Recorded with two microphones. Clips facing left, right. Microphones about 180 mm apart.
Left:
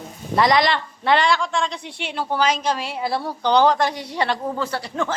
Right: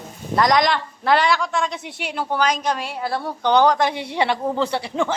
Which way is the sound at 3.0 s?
10° left (ahead or behind).